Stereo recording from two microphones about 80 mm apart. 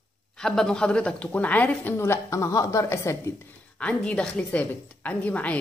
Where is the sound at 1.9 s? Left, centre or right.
Left.